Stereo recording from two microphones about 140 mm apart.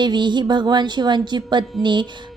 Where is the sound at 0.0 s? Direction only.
35° right (ahead or behind).